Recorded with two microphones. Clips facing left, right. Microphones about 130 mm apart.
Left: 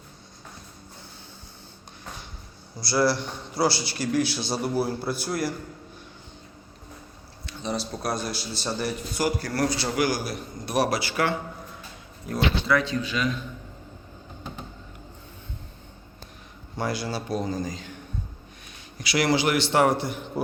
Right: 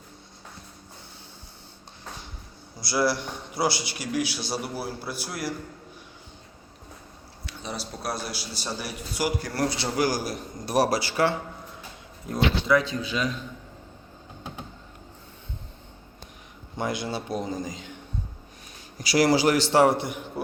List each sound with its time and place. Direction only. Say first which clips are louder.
2.8 s a man's voice: left 2 dB; 15° right (ahead or behind)
7.4 s a man's voice: left 5 dB; 5° right (ahead or behind)
9.6 s a man's voice: even; 25° right (ahead or behind)
12.3 s a man's voice: right 1 dB; 15° right (ahead or behind)
16.7 s a man's voice: even; 20° right (ahead or behind)
18.9 s a man's voice: right 2 dB; 40° right (ahead or behind)
20.4 s speech: left 4 dB; centre (ahead or behind)